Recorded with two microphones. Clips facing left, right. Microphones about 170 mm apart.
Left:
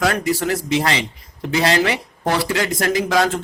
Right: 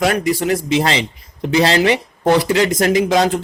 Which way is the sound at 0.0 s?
20° right (ahead or behind).